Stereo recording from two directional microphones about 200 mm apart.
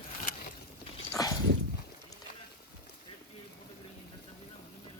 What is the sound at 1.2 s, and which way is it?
Dog, 20° left (ahead or behind).